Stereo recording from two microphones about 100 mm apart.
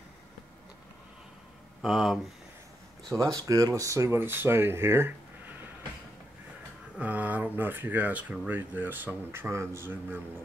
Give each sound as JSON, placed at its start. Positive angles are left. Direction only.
{"t": 1.8, "sound": "speech", "side_deg": -5}
{"t": 3.3, "sound": "speech", "side_deg": -35}
{"t": 4.2, "sound": "speech", "side_deg": -20}
{"t": 7.0, "sound": "speech", "side_deg": -15}